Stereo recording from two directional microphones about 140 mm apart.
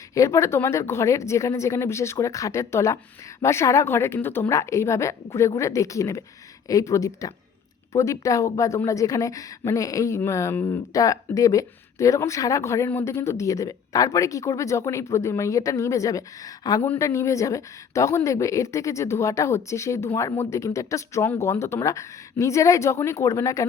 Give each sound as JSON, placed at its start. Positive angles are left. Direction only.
{"t": 0.1, "sound": "a woman's voice", "side_deg": 20}